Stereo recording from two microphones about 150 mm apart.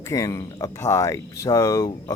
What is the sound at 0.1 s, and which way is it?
Speech, 25° left (ahead or behind).